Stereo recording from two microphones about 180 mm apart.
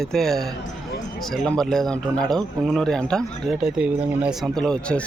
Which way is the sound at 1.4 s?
5° left (ahead or behind).